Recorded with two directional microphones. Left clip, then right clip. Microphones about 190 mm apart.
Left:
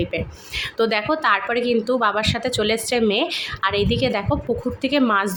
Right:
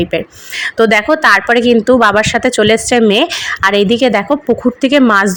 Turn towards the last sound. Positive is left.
turn(degrees=-30)  # may be behind; listen again after turning